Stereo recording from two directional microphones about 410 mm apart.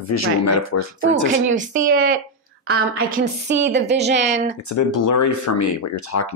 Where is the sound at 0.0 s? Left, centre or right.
Left.